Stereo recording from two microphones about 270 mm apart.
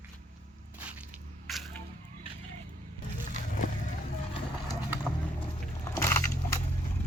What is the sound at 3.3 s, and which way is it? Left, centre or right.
Vehicle, left.